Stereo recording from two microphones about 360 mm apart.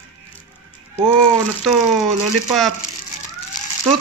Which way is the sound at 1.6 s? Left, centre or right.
Centre.